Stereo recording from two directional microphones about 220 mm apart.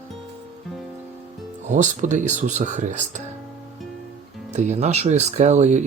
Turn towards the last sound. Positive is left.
turn(degrees=-30)  # may be behind; listen again after turning